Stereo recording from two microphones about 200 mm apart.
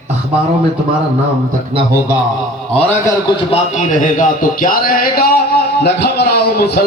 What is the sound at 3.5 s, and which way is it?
A man's voice, 40° left (ahead or behind).